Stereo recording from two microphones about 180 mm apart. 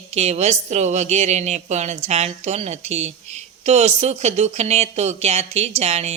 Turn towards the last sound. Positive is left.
turn(degrees=-35)  # may be behind; listen again after turning